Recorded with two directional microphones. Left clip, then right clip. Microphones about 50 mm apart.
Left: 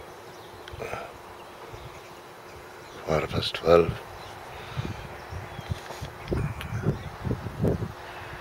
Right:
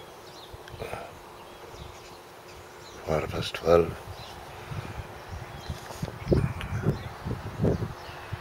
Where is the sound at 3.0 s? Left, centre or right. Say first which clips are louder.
Left 2 dB; centre.